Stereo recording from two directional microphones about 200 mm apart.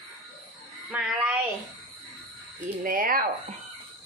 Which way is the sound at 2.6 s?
45° right (ahead or behind).